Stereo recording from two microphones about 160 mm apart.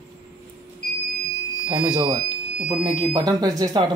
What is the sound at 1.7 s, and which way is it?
Speech, 30° right (ahead or behind).